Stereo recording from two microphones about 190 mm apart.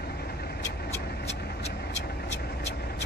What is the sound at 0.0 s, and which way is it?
Vehicle, 55° left (ahead or behind).